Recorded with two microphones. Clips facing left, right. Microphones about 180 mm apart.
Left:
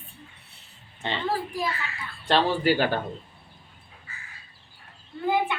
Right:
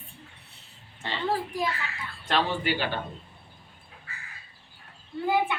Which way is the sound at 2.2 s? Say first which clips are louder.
Left 5 dB; 30° left (ahead or behind).